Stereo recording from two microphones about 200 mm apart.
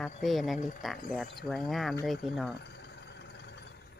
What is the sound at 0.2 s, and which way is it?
Speech, centre (ahead or behind).